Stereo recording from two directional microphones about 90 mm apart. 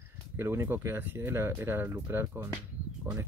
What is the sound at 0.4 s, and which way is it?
Speech, 30° right (ahead or behind).